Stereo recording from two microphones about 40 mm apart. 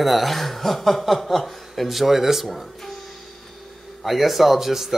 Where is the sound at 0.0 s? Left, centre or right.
Centre.